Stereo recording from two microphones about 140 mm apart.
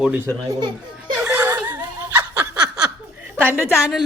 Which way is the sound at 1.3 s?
20° right (ahead or behind).